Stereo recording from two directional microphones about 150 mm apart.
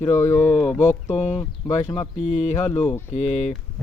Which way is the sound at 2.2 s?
50° left (ahead or behind).